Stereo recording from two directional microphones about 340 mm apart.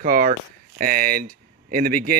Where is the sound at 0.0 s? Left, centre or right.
Right.